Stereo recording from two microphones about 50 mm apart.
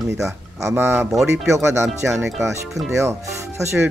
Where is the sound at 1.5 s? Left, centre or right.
Right.